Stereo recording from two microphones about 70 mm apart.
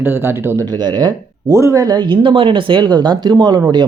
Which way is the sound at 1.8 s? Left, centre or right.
Right.